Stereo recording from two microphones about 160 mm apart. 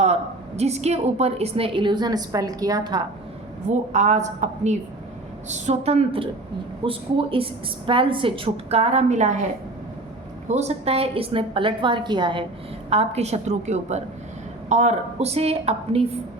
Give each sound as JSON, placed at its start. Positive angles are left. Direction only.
{"t": 0.0, "sound": "a woman's voice", "side_deg": -40}
{"t": 3.7, "sound": "a woman's voice", "side_deg": -45}
{"t": 10.5, "sound": "a woman's voice", "side_deg": -45}
{"t": 12.9, "sound": "a woman's voice", "side_deg": -40}